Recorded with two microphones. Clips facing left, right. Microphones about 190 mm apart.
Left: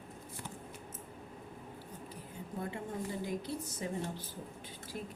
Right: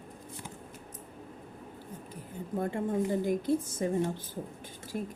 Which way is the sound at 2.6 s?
50° right (ahead or behind).